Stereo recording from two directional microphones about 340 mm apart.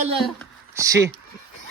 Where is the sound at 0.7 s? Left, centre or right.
Centre.